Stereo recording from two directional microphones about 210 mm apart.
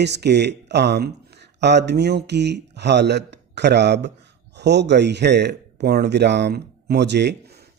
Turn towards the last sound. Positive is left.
turn(degrees=-55)  # may be behind; listen again after turning